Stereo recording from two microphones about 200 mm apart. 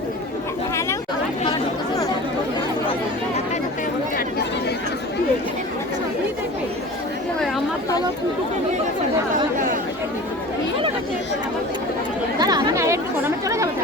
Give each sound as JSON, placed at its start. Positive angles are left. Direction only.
{"t": 7.3, "sound": "chatter", "side_deg": 0}
{"t": 12.4, "sound": "chatter", "side_deg": -20}